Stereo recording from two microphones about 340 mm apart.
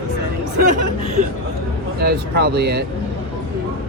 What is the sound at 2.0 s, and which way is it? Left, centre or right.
Speech, right.